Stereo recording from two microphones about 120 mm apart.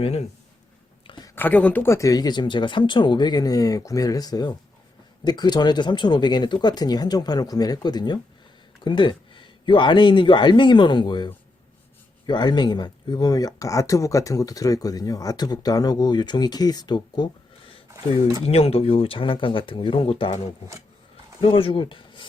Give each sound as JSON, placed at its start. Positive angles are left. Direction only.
{"t": 0.0, "sound": "speech", "side_deg": 55}
{"t": 1.0, "sound": "a sound", "side_deg": 40}
{"t": 1.4, "sound": "speech", "side_deg": 15}
{"t": 18.4, "sound": "speech", "side_deg": 60}
{"t": 21.4, "sound": "speech", "side_deg": 45}